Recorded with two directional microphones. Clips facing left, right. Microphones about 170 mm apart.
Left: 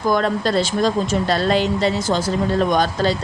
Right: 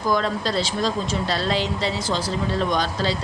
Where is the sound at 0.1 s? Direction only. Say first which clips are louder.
Left 4 dB; 55° left (ahead or behind).